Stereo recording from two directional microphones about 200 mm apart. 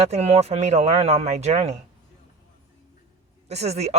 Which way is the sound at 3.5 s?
35° right (ahead or behind).